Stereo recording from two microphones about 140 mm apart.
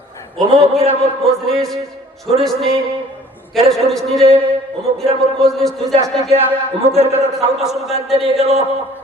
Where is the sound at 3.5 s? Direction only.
Centre (ahead or behind).